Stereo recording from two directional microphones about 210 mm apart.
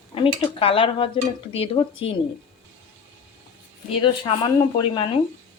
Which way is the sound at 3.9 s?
25° left (ahead or behind).